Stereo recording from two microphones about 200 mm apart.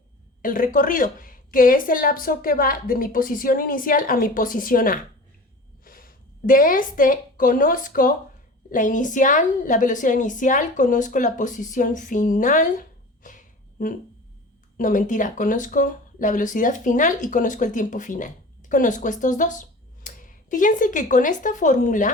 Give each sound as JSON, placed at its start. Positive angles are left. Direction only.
{"t": 0.4, "sound": "a woman's voice", "side_deg": 45}
{"t": 13.2, "sound": "a sound", "side_deg": 40}
{"t": 14.8, "sound": "a woman's voice", "side_deg": 40}